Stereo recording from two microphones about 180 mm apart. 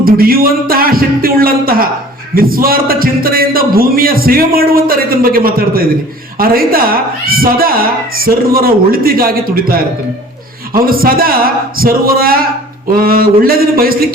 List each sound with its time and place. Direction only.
0.0 s a man's voice: 55° right (ahead or behind)
10.8 s a man's voice: 55° right (ahead or behind)